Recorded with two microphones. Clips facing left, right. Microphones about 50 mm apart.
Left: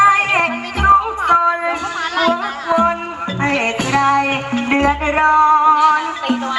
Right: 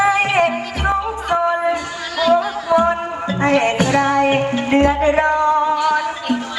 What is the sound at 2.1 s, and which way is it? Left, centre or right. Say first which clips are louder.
Music: right 3 dB; left.